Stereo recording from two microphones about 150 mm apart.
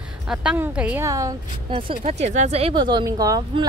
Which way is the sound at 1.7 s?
40° right (ahead or behind).